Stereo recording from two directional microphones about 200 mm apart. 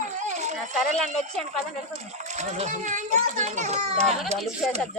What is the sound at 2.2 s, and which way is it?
A child's voice, 35° right (ahead or behind).